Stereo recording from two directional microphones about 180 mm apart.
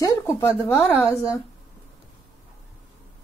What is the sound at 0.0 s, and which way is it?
Speech, 15° left (ahead or behind).